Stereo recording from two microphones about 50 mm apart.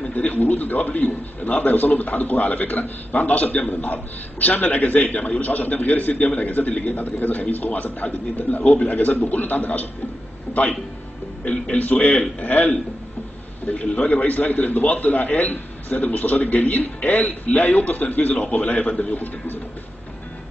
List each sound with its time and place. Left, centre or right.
0.0 s a man's voice: left
11.4 s a man's voice: left